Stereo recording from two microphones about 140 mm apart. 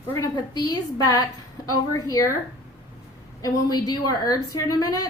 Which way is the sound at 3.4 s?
30° left (ahead or behind).